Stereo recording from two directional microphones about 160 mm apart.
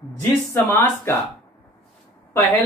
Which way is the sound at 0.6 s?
15° left (ahead or behind).